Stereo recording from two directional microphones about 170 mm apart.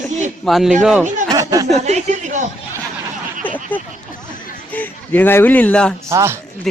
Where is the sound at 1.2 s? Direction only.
20° right (ahead or behind).